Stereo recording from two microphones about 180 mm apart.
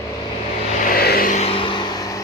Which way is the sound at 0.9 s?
60° left (ahead or behind).